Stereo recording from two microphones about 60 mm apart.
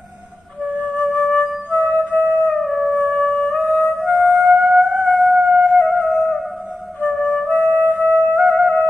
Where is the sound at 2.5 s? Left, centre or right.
Centre.